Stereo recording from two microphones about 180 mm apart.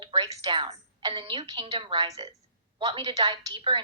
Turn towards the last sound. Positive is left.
turn(degrees=-25)  # may be behind; listen again after turning